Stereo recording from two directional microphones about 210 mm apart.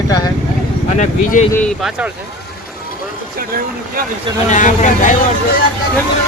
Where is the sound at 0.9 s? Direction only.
40° left (ahead or behind).